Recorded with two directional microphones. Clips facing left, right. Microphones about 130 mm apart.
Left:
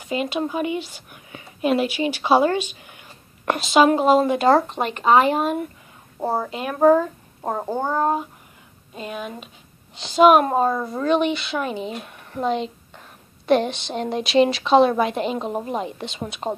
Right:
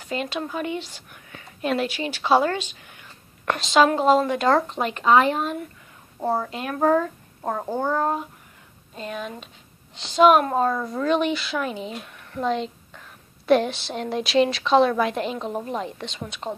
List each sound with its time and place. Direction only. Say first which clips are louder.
0.0 s a woman's voice: left 4 dB; 10° left (ahead or behind)
6.8 s speech: left 5 dB; 20° left (ahead or behind)
8.9 s a woman's voice: left 1 dB; 10° left (ahead or behind)
11.1 s a woman's voice: left 2 dB; centre (ahead or behind)
16.4 s a woman's voice: left 4 dB; 25° left (ahead or behind)